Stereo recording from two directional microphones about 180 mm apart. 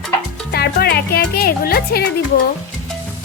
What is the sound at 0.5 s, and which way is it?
Speech, 60° left (ahead or behind).